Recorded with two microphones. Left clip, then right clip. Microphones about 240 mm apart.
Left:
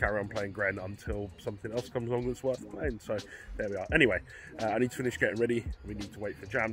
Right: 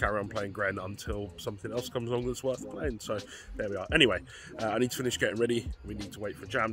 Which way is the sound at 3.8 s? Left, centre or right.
Centre.